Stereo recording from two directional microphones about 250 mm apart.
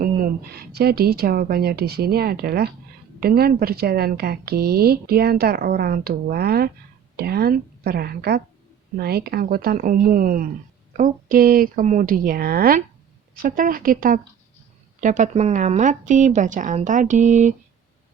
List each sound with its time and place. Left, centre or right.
0.0 s a woman's voice: right